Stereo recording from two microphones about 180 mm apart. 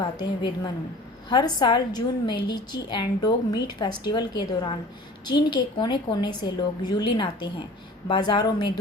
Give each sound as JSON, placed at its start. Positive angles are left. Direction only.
{"t": 0.0, "sound": "a woman's voice", "side_deg": 25}